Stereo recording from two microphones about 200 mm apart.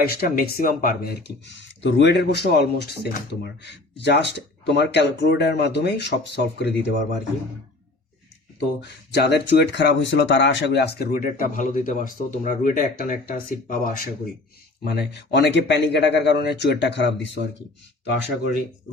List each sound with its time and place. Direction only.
0.0 s speech: 50° left (ahead or behind)
8.5 s speech: 60° left (ahead or behind); by 14.1 s 45° left (ahead or behind)
14.8 s speech: 55° left (ahead or behind)